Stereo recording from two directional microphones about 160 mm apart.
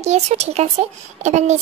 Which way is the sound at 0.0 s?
45° right (ahead or behind).